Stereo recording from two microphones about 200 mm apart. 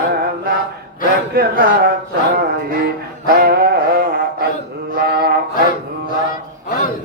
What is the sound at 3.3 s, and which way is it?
Music, 50° right (ahead or behind).